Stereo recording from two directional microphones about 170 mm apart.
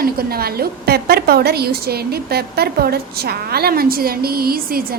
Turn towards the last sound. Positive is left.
turn(degrees=-60)  # may be behind; listen again after turning